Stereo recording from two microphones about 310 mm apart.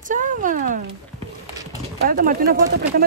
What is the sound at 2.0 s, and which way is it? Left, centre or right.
Speech, right.